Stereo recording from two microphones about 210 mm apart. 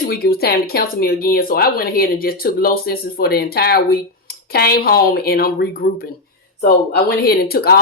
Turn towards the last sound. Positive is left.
turn(degrees=45)  # may be behind; listen again after turning